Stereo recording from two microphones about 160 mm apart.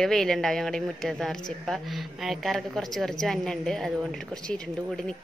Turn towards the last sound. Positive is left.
turn(degrees=5)  # may be behind; listen again after turning